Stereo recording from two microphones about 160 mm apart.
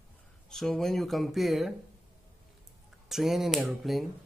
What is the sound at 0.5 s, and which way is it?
Speech, 5° left (ahead or behind).